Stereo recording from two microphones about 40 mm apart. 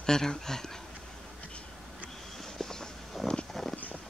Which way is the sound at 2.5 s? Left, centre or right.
Centre.